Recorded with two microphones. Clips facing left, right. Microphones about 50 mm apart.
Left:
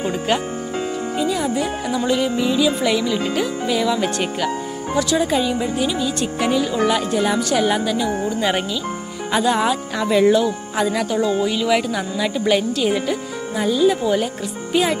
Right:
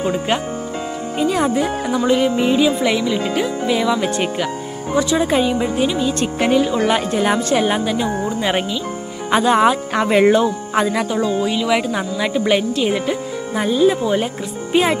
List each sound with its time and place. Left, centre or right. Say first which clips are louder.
1.2 s speech: right 5 dB; right
1.5 s speech: right 3 dB; right
2.8 s speech: right 1 dB; centre
4.9 s speech: right 2 dB; right
8.4 s speech: right 1 dB; centre
9.3 s speech: right 4 dB; right
9.9 s speech: even; right
10.9 s speech: right 1 dB; centre
11.1 s speech: right 1 dB; centre
11.9 s speech: right 2 dB; right
12.9 s speech: right 1 dB; centre
13.6 s speech: right 2 dB; right